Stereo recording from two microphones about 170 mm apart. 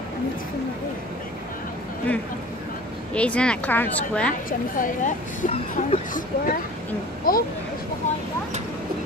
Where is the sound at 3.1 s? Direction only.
5° left (ahead or behind).